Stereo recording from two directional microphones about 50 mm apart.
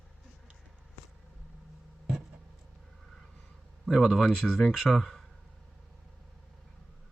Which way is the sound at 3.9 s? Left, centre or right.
Centre.